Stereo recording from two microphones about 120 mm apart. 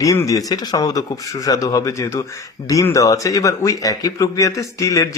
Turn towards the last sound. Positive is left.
turn(degrees=25)  # may be behind; listen again after turning